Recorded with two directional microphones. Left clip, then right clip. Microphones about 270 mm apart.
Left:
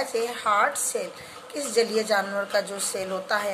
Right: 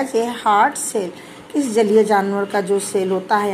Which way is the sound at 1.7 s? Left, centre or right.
Centre.